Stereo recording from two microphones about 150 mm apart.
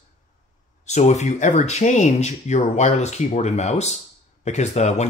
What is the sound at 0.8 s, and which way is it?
Speech, 50° left (ahead or behind).